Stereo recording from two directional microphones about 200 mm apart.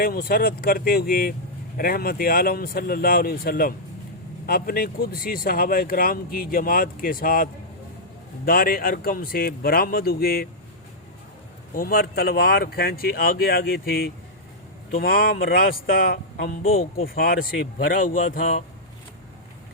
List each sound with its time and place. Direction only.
0.0 s speech: 45° left (ahead or behind)
11.7 s speech: 45° left (ahead or behind)